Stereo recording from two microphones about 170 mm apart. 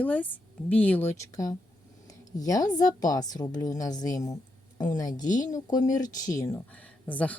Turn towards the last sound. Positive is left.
turn(degrees=10)  # may be behind; listen again after turning